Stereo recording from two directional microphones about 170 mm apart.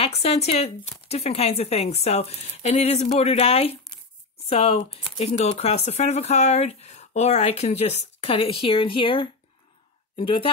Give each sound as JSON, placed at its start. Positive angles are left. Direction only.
{"t": 0.0, "sound": "speech", "side_deg": 35}